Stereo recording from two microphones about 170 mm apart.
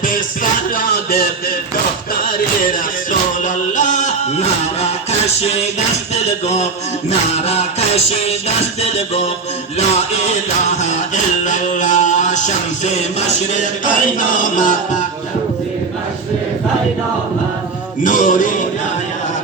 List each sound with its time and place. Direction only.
3.4 s music: 45° left (ahead or behind)
7.1 s music: 35° left (ahead or behind)
18.0 s music: 50° left (ahead or behind)